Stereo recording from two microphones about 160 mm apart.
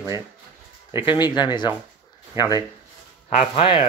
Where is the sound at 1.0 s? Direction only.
25° left (ahead or behind).